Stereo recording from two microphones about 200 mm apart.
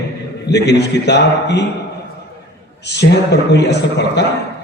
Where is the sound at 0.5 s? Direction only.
55° left (ahead or behind).